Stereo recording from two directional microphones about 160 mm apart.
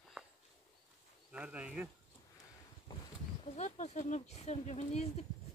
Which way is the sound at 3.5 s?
45° left (ahead or behind).